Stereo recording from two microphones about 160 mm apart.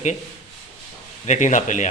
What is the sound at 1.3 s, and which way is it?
Speech, 50° left (ahead or behind).